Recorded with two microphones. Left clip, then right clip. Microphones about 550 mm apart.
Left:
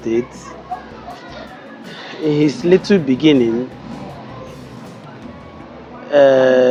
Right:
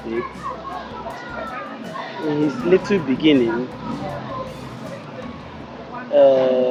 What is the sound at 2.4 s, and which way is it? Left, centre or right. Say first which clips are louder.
Speech: left 3 dB; left.